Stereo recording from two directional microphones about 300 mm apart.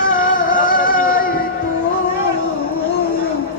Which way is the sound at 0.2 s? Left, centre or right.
Left.